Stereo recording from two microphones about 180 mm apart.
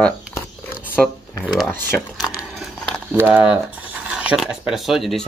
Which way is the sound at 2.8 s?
5° left (ahead or behind).